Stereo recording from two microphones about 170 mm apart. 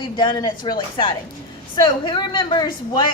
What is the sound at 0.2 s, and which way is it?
A woman's voice, 25° left (ahead or behind).